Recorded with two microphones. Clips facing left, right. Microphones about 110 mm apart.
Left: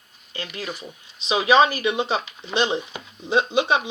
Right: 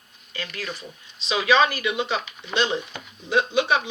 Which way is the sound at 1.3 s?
25° left (ahead or behind).